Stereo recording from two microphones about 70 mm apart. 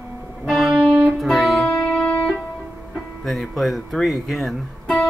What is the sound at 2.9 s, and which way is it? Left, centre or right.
Music, centre.